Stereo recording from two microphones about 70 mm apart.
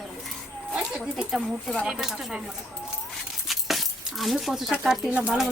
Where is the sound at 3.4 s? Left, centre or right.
Centre.